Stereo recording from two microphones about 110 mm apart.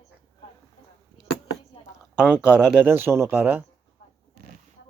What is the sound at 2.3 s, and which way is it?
Speech, 10° right (ahead or behind).